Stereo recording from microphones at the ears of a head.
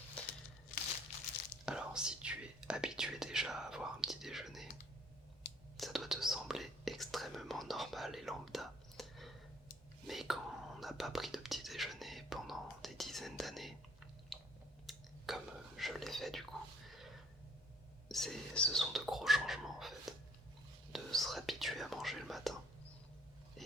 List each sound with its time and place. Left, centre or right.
0.1 s crumpling: left
1.6 s whispering: centre
5.7 s whispering: centre
14.8 s whispering: centre
18.3 s whispering: centre